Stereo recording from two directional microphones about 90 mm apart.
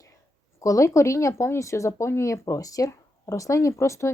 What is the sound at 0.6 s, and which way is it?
Speech, 35° left (ahead or behind).